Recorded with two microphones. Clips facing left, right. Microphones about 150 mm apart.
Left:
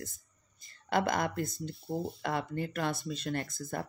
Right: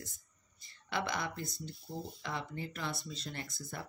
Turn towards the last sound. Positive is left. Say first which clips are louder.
# left 7 dB
turn(degrees=50)  # may be behind; listen again after turning